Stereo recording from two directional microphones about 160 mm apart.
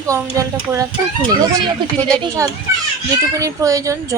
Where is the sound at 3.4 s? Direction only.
20° right (ahead or behind).